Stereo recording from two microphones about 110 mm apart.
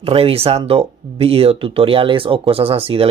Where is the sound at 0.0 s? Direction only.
60° right (ahead or behind).